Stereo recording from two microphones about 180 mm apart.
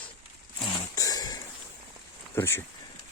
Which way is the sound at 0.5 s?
20° left (ahead or behind).